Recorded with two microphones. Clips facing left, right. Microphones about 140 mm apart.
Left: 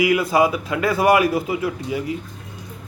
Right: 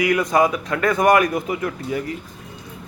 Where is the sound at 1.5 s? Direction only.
20° left (ahead or behind).